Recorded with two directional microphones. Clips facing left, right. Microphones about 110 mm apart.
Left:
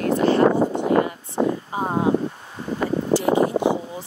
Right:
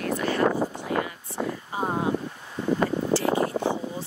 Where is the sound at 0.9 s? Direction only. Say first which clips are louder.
Left 8 dB; 40° left (ahead or behind).